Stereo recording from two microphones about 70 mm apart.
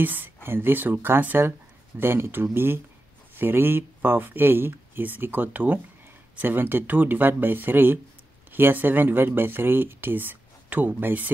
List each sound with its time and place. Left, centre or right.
0.0 s speech: right